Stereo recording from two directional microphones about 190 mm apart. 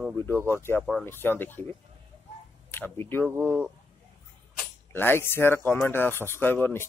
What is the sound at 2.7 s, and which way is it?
Speech, 10° left (ahead or behind).